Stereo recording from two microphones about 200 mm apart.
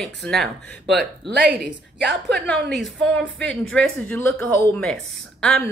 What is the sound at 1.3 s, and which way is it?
Speech, 55° right (ahead or behind).